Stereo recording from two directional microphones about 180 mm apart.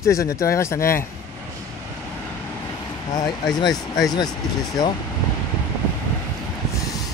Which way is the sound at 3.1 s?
20° left (ahead or behind).